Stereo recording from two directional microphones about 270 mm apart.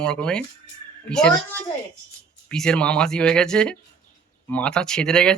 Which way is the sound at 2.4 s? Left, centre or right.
Centre.